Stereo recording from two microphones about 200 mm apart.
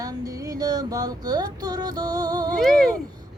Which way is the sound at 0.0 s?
20° right (ahead or behind).